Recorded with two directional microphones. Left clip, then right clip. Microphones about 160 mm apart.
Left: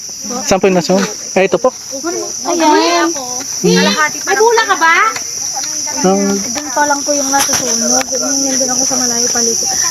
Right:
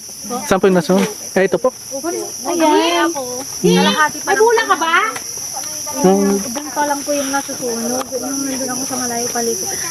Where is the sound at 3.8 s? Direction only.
25° left (ahead or behind).